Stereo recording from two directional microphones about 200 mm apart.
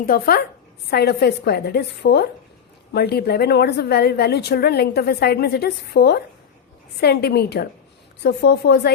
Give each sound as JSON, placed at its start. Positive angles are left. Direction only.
{"t": 0.0, "sound": "a woman's voice", "side_deg": 50}